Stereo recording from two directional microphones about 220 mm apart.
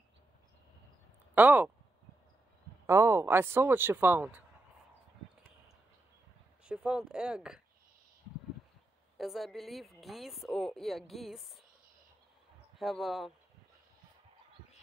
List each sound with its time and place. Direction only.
1.3 s speech: 5° right (ahead or behind)
2.9 s speech: 10° right (ahead or behind)
6.6 s a woman's voice: 5° right (ahead or behind)
9.2 s a woman's voice: centre (ahead or behind)
12.7 s a woman's voice: centre (ahead or behind)